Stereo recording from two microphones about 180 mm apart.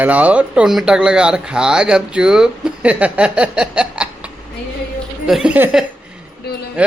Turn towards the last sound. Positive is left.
turn(degrees=65)  # may be behind; listen again after turning